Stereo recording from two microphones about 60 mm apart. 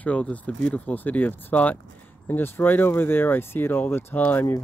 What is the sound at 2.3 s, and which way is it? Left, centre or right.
Speech, left.